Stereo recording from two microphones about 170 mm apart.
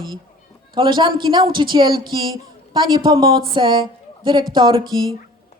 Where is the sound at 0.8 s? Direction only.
25° right (ahead or behind).